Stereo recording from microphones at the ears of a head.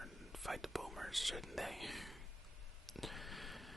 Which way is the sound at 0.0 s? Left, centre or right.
Centre.